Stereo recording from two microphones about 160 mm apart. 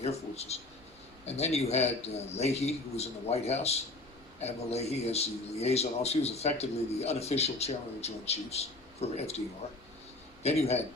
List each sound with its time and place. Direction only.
0.0 s a man's voice: 40° left (ahead or behind)
10.4 s a man's voice: 40° left (ahead or behind)